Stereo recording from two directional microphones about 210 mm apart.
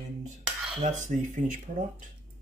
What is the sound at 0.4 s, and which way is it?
Cutlery, 5° right (ahead or behind).